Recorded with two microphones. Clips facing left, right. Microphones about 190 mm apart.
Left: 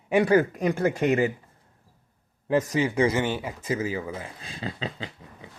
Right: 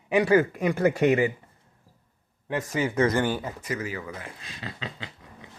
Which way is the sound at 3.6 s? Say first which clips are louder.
Left 4 dB; 25° left (ahead or behind).